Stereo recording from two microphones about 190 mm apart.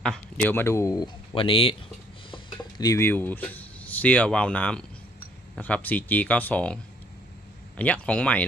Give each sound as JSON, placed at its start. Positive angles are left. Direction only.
{"t": 0.0, "sound": "speech", "side_deg": 5}
{"t": 7.8, "sound": "speech", "side_deg": 5}